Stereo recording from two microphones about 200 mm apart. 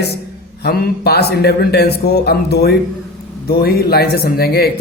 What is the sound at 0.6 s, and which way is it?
Speech, 55° left (ahead or behind).